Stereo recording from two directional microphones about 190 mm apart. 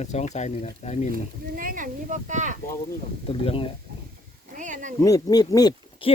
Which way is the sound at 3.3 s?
30° left (ahead or behind).